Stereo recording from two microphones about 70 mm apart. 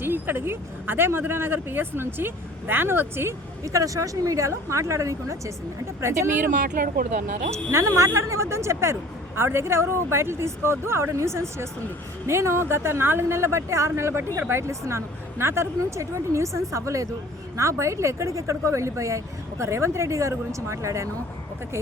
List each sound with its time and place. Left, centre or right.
0.0 s a woman's voice: right
3.7 s a woman's voice: right
7.5 s a woman's voice: right